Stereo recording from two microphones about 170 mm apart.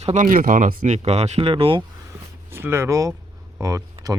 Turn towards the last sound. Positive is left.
turn(degrees=-20)  # may be behind; listen again after turning